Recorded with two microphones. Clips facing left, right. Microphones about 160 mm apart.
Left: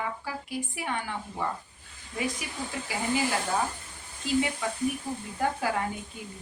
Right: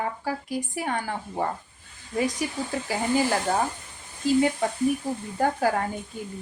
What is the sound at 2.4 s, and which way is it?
Speech, 40° right (ahead or behind).